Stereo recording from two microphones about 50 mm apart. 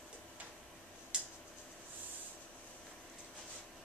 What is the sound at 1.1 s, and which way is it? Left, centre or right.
Tick-tock, centre.